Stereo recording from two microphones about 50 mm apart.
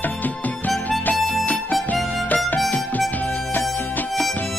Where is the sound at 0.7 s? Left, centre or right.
Left.